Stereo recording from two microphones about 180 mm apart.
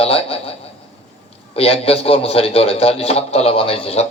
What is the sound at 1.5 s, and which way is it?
A man's voice, 35° left (ahead or behind).